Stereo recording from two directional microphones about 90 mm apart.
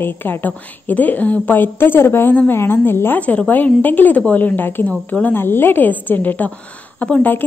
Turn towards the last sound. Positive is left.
turn(degrees=15)  # may be behind; listen again after turning